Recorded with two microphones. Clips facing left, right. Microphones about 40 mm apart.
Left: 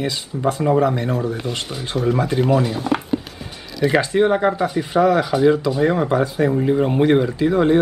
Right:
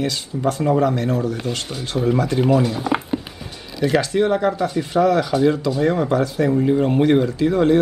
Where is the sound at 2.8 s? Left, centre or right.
Centre.